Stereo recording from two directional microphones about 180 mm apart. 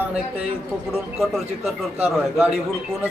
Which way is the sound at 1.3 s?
5° right (ahead or behind).